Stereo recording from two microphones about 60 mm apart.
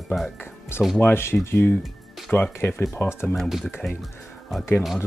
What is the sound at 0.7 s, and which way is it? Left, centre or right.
Speech, left.